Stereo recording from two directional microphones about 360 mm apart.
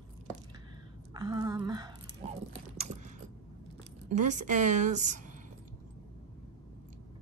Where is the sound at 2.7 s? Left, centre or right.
Centre.